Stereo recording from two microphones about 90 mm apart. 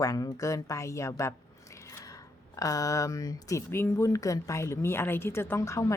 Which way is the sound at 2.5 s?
40° left (ahead or behind).